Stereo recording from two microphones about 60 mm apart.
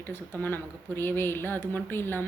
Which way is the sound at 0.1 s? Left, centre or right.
Left.